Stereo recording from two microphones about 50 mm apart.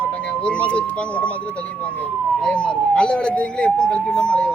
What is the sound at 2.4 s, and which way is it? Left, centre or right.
Speech, left.